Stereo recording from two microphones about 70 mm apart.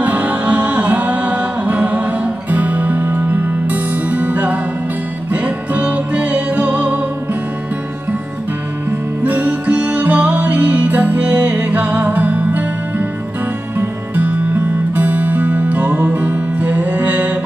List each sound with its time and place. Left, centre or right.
0.0 s music: right
9.2 s music: right